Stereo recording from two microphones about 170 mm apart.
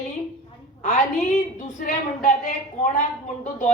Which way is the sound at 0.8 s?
45° left (ahead or behind).